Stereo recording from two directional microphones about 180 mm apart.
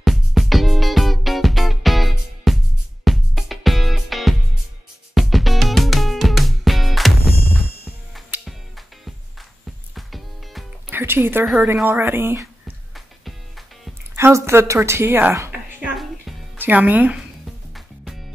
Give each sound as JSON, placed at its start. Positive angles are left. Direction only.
{"t": 0.0, "sound": "music", "side_deg": 0}
{"t": 10.9, "sound": "music", "side_deg": -10}
{"t": 11.6, "sound": "a woman's voice", "side_deg": -10}
{"t": 12.9, "sound": "music", "side_deg": 0}
{"t": 14.1, "sound": "a woman's voice", "side_deg": -15}